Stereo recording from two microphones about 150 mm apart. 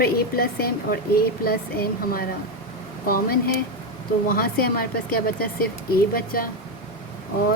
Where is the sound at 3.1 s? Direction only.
85° left.